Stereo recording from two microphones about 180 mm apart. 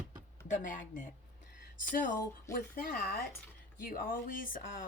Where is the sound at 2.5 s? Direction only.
55° left (ahead or behind).